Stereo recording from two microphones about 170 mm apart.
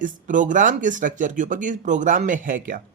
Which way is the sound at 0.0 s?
50° right (ahead or behind).